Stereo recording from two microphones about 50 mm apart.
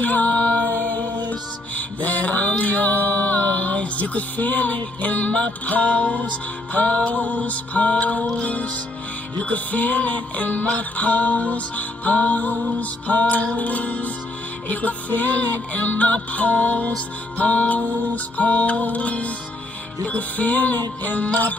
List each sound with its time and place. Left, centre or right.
0.0 s music: left
1.8 s mantra: left
6.7 s music: left